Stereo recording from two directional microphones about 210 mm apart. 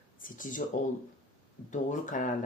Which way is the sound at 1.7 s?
35° left (ahead or behind).